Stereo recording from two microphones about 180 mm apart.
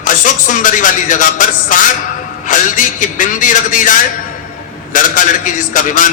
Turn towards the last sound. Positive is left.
turn(degrees=45)  # may be behind; listen again after turning